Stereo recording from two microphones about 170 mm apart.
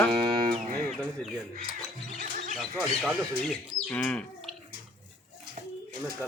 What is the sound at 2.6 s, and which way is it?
Speech, centre (ahead or behind).